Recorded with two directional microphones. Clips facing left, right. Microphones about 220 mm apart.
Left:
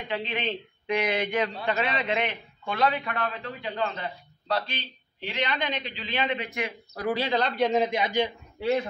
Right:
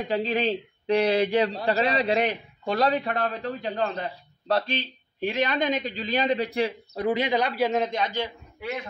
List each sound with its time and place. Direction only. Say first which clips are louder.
0.1 s a man's voice: right 5 dB; 40° right (ahead or behind); by 8.3 s 15° left (ahead or behind)
8.5 s speech: left 8 dB; 30° left (ahead or behind)